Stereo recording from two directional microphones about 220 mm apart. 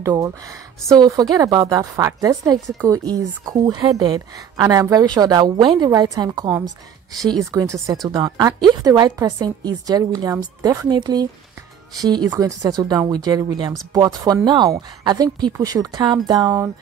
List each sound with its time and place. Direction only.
0.0 s a woman's voice: 15° right (ahead or behind)